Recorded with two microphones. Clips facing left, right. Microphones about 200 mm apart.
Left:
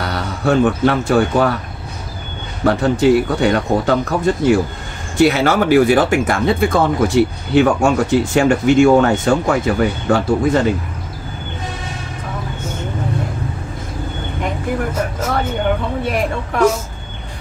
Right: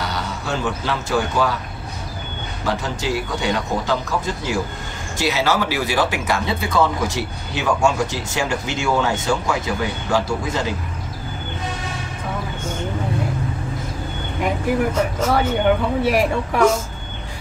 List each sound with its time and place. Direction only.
0.0 s speech: 60° left (ahead or behind)
2.6 s speech: 60° left (ahead or behind)
15.0 s speech: 5° left (ahead or behind)
16.0 s speech: 5° right (ahead or behind)